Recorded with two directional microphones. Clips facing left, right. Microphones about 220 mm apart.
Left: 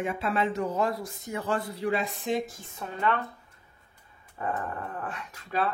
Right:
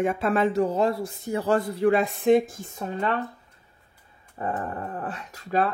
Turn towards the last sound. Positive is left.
turn(degrees=-40)  # may be behind; listen again after turning